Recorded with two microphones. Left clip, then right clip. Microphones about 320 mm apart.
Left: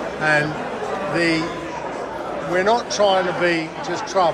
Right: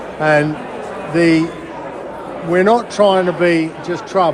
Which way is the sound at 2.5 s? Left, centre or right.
Right.